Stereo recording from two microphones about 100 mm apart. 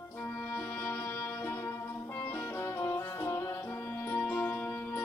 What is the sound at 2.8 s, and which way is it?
Music, 25° left (ahead or behind).